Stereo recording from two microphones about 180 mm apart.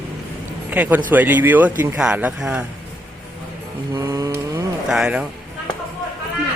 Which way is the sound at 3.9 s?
20° right (ahead or behind).